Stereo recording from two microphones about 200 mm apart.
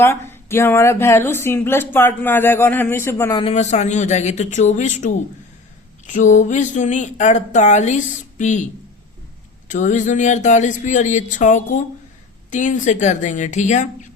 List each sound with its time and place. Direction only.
0.0 s speech: 10° left (ahead or behind)
3.4 s speech: 35° left (ahead or behind)
9.6 s speech: 40° left (ahead or behind)